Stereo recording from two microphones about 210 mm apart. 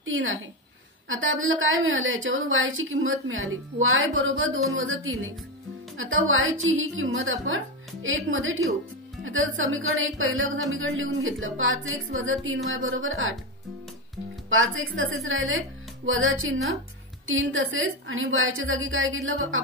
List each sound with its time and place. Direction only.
0.0 s a woman's voice: 70° right (ahead or behind)
14.5 s a woman's voice: 70° right (ahead or behind)